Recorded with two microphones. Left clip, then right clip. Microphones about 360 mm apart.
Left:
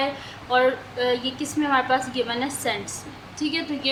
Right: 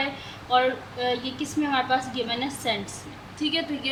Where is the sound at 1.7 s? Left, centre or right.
Centre.